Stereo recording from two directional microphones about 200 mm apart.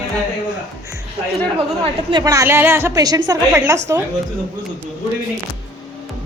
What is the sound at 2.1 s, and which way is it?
A woman's voice, 20° right (ahead or behind).